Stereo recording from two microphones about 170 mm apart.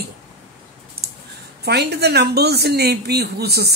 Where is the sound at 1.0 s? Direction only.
65° right (ahead or behind).